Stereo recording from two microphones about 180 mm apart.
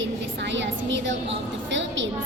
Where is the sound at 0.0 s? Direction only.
80° right.